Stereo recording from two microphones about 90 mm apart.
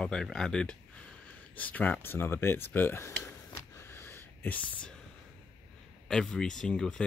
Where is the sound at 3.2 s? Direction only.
30° left (ahead or behind).